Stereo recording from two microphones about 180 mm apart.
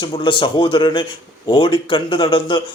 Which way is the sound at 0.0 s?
25° left (ahead or behind).